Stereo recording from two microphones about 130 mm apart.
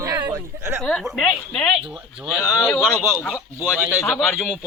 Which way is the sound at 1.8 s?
5° right (ahead or behind).